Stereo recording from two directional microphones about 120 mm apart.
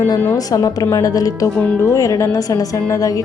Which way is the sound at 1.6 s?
15° left (ahead or behind).